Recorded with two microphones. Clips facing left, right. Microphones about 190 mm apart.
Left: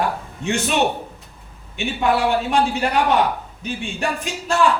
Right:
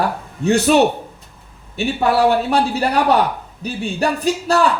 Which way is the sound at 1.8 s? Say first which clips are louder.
Right 4 dB; 35° right (ahead or behind).